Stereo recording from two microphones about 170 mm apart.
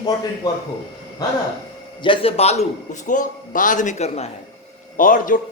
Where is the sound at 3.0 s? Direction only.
50° left (ahead or behind).